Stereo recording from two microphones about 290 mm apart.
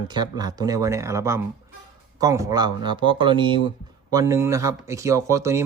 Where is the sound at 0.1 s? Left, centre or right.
Centre.